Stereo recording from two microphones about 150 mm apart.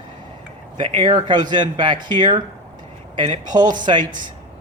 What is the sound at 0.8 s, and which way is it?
Speech, 35° right (ahead or behind).